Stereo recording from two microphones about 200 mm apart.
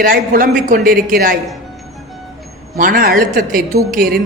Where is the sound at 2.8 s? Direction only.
45° right (ahead or behind).